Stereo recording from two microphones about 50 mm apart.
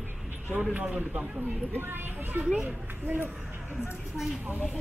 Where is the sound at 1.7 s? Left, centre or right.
Right.